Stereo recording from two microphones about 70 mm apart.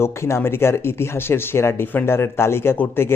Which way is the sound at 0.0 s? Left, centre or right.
Left.